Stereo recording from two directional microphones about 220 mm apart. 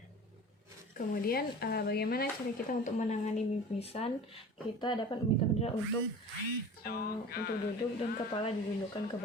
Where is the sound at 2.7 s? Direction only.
35° left (ahead or behind).